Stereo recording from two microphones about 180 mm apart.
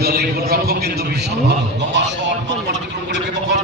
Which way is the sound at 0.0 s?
60° right (ahead or behind).